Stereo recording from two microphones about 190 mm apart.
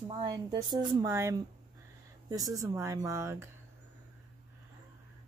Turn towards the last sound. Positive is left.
turn(degrees=-15)  # may be behind; listen again after turning